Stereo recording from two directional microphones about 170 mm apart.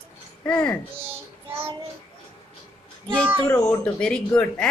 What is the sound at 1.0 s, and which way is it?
Child singing, 15° right (ahead or behind).